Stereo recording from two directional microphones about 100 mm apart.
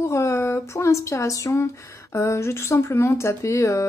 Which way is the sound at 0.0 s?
30° left (ahead or behind).